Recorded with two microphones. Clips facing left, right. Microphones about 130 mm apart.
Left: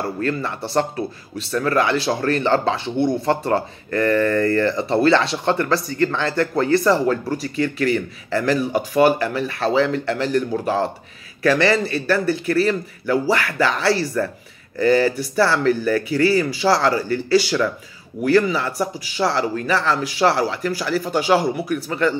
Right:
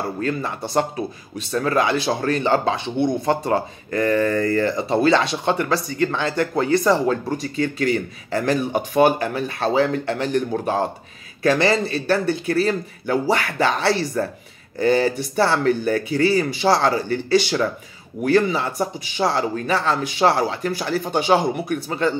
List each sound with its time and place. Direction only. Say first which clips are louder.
0.2 s speech: left 1 dB; 15° right (ahead or behind)